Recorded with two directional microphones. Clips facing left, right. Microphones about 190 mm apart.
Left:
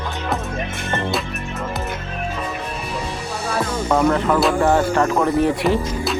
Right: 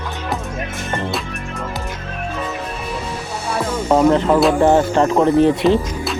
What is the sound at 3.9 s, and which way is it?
Speech, 25° right (ahead or behind).